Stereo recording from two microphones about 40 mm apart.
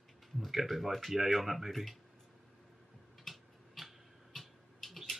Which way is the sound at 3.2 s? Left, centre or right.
Centre.